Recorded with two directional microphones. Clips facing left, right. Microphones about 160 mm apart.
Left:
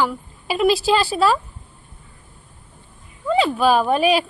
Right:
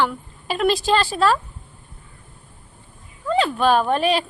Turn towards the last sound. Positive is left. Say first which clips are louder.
# left 2 dB
turn(degrees=10)  # may be behind; listen again after turning